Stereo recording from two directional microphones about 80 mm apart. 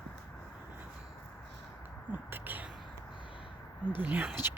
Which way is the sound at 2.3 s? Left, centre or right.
Right.